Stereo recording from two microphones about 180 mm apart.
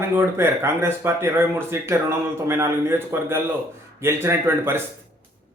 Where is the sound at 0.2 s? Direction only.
15° right (ahead or behind).